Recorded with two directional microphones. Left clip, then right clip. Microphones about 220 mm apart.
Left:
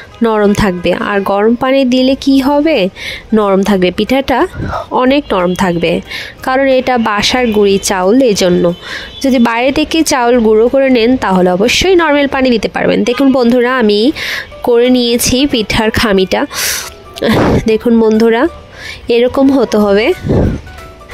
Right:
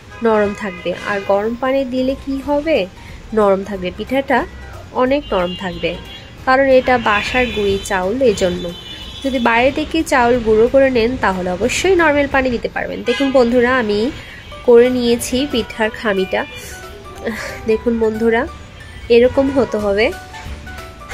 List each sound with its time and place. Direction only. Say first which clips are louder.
0.2 s speech: left 5 dB; 40° left (ahead or behind)